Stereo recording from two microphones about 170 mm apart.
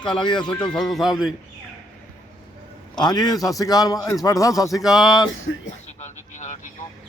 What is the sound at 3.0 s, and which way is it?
A man's voice, 25° left (ahead or behind).